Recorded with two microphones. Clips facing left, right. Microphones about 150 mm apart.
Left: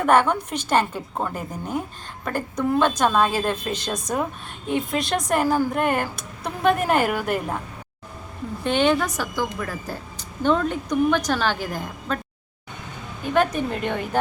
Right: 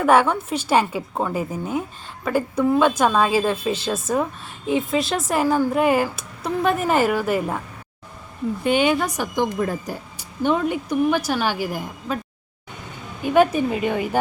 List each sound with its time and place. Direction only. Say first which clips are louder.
0.0 s speech: right 2 dB; 5° right (ahead or behind)
8.6 s speech: right 1 dB; 10° right (ahead or behind)
9.9 s speech: right 1 dB; 10° right (ahead or behind)
13.2 s speech: right 4 dB; 10° right (ahead or behind)